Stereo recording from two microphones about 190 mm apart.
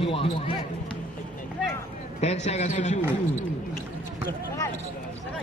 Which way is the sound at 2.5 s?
40° left (ahead or behind).